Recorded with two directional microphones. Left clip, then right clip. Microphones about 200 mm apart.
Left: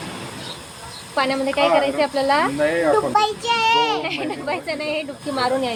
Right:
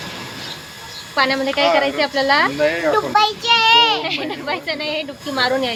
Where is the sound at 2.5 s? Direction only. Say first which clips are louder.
Right 1 dB; 45° left (ahead or behind).